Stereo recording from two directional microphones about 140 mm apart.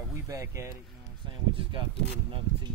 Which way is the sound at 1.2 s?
35° right (ahead or behind).